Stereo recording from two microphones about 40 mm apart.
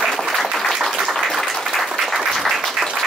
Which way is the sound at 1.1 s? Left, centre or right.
Centre.